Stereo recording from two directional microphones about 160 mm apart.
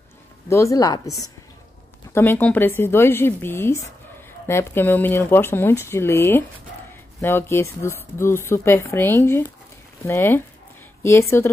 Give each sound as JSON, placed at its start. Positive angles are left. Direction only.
{"t": 0.5, "sound": "speech", "side_deg": 20}
{"t": 2.1, "sound": "speech", "side_deg": 15}